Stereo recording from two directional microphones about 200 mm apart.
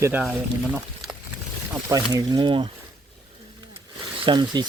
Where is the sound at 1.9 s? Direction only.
15° right (ahead or behind).